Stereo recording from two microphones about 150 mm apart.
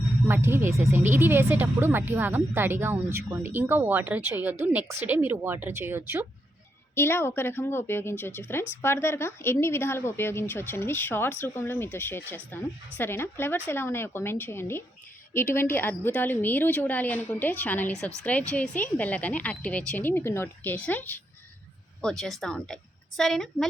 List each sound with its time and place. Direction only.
0.3 s speech: 15° right (ahead or behind)
6.9 s a woman's voice: 15° left (ahead or behind)